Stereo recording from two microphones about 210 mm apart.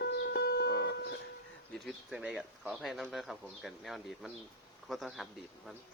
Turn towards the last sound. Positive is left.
turn(degrees=0)  # may be behind; listen again after turning